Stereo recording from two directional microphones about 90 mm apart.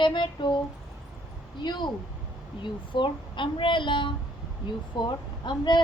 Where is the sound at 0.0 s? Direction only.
60° left (ahead or behind).